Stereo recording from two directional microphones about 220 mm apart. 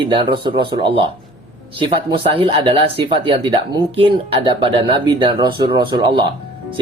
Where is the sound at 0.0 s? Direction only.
20° right (ahead or behind).